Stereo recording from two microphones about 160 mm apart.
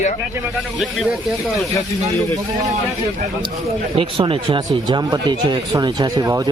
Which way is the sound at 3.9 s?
35° right (ahead or behind).